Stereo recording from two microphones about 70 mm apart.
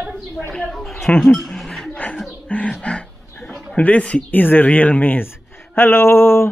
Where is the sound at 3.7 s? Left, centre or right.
Left.